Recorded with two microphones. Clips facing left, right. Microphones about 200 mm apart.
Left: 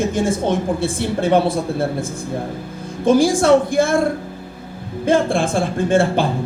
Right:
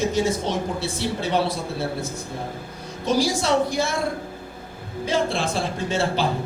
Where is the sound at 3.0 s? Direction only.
50° left (ahead or behind).